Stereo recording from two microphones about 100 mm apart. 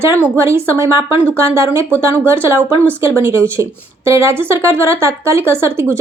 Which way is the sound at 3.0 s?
30° right (ahead or behind).